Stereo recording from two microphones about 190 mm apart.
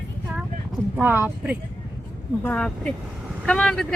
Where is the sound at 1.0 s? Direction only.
10° right (ahead or behind).